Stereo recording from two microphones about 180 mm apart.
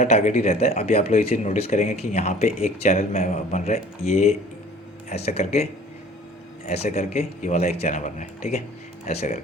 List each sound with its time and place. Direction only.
0.0 s speech: 40° left (ahead or behind)
6.7 s speech: 35° left (ahead or behind)